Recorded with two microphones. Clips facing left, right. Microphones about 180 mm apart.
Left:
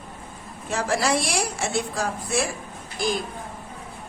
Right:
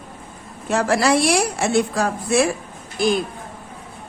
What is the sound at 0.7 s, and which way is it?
A woman's voice, 65° right (ahead or behind).